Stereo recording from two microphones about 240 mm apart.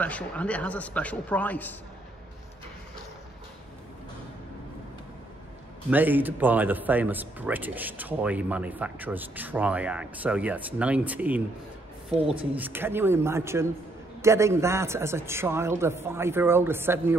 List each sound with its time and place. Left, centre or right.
0.0 s a man's voice: centre
5.9 s speech: centre
12.1 s speech: right
12.5 s speech: centre